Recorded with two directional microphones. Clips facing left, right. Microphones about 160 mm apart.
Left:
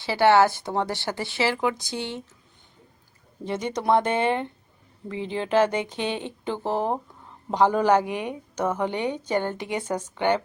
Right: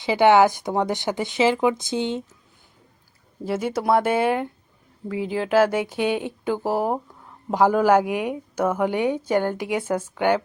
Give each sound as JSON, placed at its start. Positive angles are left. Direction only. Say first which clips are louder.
{"t": 0.0, "sound": "a woman's voice", "louder": "right 3 dB", "side_deg": -15}
{"t": 3.4, "sound": "a woman's voice", "louder": "right 2 dB", "side_deg": -5}